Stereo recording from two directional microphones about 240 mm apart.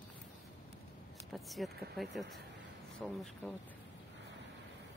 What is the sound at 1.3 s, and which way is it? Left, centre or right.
Speech, centre.